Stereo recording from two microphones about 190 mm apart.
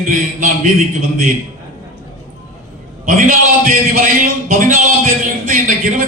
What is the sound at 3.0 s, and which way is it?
A man's voice, 45° right (ahead or behind).